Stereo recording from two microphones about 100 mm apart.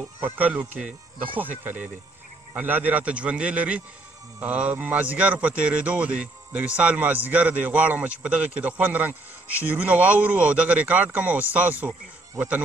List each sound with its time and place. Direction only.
0.2 s a man's voice: 15° right (ahead or behind)